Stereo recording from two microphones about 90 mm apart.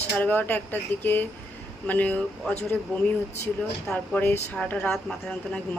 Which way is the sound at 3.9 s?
5° left (ahead or behind).